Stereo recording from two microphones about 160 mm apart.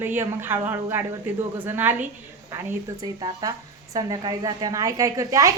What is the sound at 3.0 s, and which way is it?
A woman's voice, 25° right (ahead or behind).